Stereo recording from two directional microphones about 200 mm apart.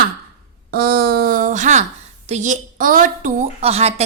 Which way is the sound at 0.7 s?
50° right (ahead or behind).